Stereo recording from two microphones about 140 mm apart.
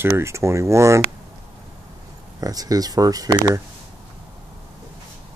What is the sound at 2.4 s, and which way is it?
Speech, 25° right (ahead or behind).